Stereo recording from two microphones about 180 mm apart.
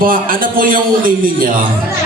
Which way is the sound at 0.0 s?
50° right (ahead or behind).